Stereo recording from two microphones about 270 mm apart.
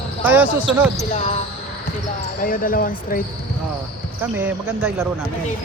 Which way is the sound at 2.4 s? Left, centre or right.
Left.